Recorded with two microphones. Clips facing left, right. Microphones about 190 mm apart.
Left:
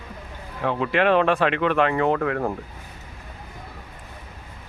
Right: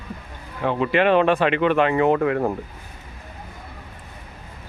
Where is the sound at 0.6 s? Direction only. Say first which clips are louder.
Right 2 dB; 5° right (ahead or behind).